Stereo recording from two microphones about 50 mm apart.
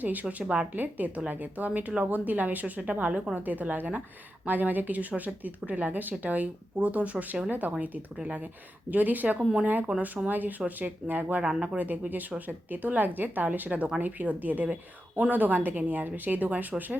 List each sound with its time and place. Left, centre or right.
0.0 s speech: right
0.7 s speech: right
8.9 s speech: right
9.4 s speech: centre
9.6 s speech: right